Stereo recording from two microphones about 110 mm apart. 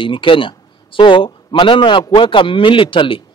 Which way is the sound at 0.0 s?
50° left (ahead or behind).